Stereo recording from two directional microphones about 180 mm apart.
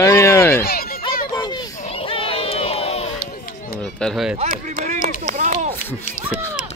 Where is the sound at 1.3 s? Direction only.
25° left (ahead or behind).